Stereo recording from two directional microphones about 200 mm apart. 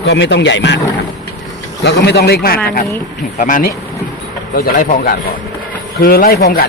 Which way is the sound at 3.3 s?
40° left (ahead or behind).